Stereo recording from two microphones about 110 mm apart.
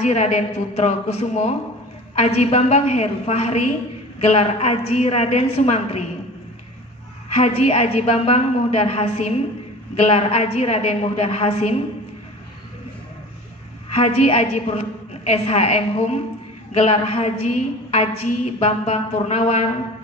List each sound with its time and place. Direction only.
0.0 s a woman's voice: 85° left
7.3 s a woman's voice: 80° left
13.9 s a woman's voice: 70° left (ahead or behind); by 19.6 s 90° left